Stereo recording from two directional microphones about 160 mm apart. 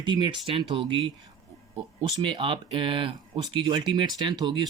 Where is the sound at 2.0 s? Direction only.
30° right (ahead or behind).